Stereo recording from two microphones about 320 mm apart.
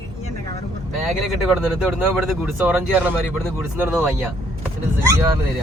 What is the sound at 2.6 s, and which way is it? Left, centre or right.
Speech, centre.